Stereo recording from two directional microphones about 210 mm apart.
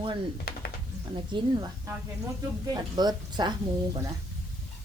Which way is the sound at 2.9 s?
20° right (ahead or behind).